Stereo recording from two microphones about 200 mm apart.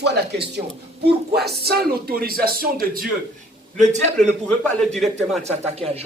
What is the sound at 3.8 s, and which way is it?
Speech, 35° right (ahead or behind).